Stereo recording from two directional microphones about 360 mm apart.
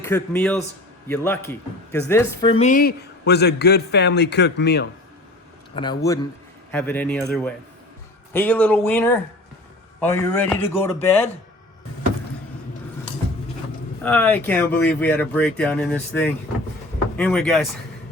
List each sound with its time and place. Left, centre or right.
0.0 s speech: centre; by 4.9 s left
5.7 s speech: centre
14.0 s speech: centre